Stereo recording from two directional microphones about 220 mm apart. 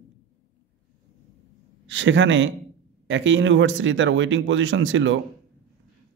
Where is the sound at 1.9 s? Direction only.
55° right (ahead or behind).